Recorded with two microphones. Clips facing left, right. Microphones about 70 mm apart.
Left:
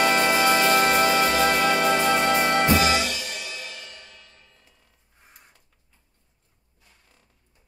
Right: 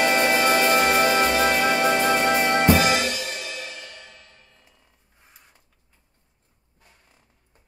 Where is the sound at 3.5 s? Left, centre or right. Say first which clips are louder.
Right 2 dB; right.